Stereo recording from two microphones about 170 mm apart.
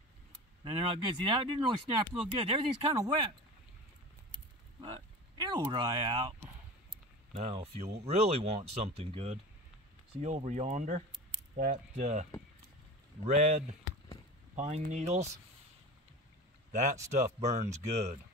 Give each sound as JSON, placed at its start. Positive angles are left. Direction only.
{"t": 0.7, "sound": "speech", "side_deg": -30}
{"t": 4.8, "sound": "speech", "side_deg": -30}
{"t": 7.3, "sound": "speech", "side_deg": -35}
{"t": 16.7, "sound": "speech", "side_deg": -45}